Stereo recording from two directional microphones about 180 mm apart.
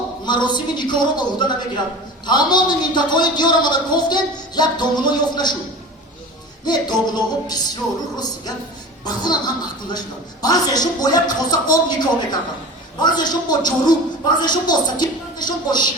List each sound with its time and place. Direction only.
0.3 s a man's voice: 25° left (ahead or behind)
6.7 s a man's voice: 25° left (ahead or behind)
10.4 s a man's voice: 20° left (ahead or behind)